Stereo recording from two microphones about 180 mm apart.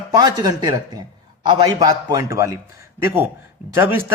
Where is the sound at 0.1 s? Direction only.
20° right (ahead or behind).